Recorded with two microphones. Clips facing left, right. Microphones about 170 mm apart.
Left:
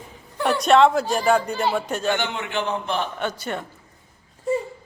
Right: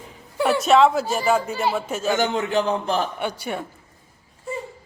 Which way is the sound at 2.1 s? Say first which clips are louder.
Right 5 dB; 40° right (ahead or behind).